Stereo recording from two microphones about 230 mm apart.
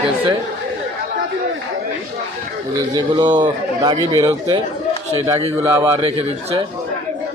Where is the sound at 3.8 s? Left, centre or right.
Centre.